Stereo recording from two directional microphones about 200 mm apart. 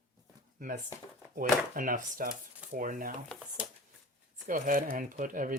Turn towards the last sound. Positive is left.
turn(degrees=-40)  # may be behind; listen again after turning